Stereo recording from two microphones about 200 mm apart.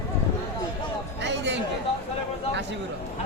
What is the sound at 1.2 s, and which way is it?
Chatter, 60° right (ahead or behind).